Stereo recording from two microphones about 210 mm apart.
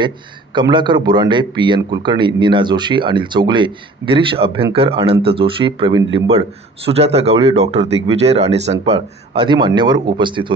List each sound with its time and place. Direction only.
0.0 s a man's voice: 20° right (ahead or behind)